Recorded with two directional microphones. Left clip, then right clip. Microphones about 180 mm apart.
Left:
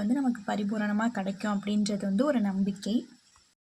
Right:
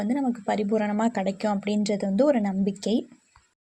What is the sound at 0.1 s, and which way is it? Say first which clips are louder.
A woman's voice: right 4 dB; 20° right (ahead or behind).